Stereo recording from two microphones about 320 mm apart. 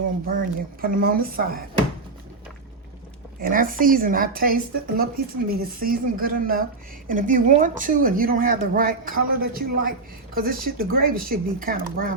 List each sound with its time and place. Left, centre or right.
0.3 s speech: right
3.4 s speech: right